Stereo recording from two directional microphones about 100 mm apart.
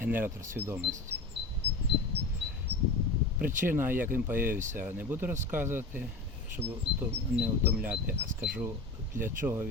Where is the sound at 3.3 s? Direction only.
20° right (ahead or behind).